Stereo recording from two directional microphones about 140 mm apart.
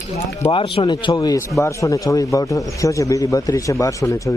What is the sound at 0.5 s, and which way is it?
A man's voice, 40° left (ahead or behind).